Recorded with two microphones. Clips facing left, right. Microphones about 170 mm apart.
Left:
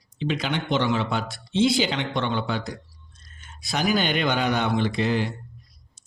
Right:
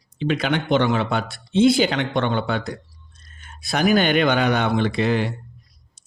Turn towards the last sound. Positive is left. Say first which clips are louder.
# right 3 dB
turn(degrees=-65)  # may be behind; listen again after turning